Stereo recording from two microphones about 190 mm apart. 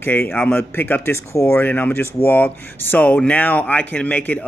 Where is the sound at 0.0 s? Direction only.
10° left (ahead or behind).